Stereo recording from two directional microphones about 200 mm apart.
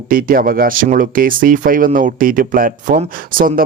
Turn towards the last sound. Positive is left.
turn(degrees=-45)  # may be behind; listen again after turning